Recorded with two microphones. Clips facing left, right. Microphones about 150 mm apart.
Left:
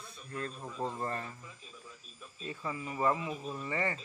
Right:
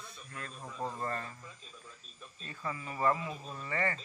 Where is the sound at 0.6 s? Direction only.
5° left (ahead or behind).